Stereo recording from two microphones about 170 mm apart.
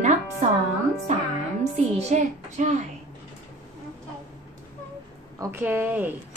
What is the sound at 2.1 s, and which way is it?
Speech, 45° right (ahead or behind).